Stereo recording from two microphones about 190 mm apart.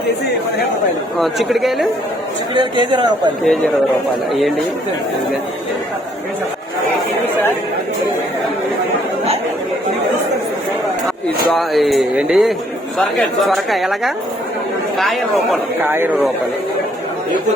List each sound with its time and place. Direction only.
1.2 s speech: centre (ahead or behind)
2.6 s a man's voice: 25° right (ahead or behind)
3.4 s speech: centre (ahead or behind)
11.5 s speech: centre (ahead or behind)
15.8 s speech: 10° right (ahead or behind)